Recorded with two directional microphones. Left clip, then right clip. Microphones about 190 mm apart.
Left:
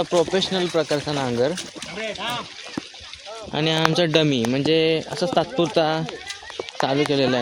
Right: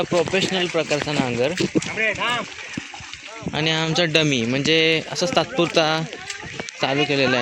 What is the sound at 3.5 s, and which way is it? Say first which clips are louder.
Speech: left 1 dB; 10° right (ahead or behind).